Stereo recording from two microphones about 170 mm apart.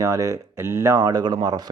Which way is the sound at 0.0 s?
20° right (ahead or behind).